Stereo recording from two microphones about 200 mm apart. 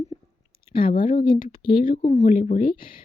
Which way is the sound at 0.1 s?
25° left (ahead or behind).